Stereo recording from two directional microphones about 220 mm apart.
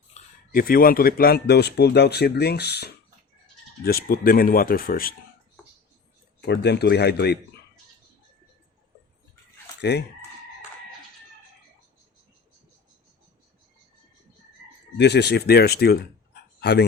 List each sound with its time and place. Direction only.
0.1 s speech: 40° left (ahead or behind)
6.4 s speech: 50° left (ahead or behind)
14.9 s speech: 50° left (ahead or behind)